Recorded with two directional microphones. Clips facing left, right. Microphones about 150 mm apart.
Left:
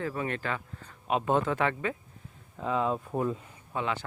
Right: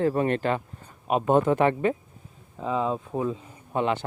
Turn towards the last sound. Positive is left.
turn(degrees=-20)  # may be behind; listen again after turning